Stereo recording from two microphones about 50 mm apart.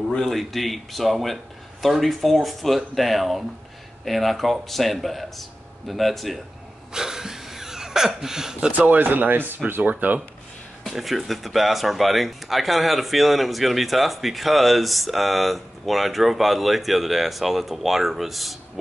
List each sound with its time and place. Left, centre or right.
0.2 s speech: centre
6.9 s a sound: centre
8.7 s speech: right
10.8 s speech: centre